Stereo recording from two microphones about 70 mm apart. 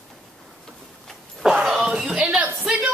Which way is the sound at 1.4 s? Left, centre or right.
Centre.